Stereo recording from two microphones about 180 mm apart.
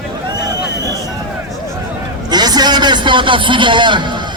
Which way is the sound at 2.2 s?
25° right (ahead or behind).